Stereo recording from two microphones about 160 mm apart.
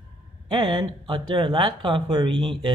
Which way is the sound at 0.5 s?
30° right (ahead or behind).